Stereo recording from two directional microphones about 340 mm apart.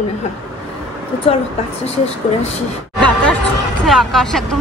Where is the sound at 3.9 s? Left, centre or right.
Centre.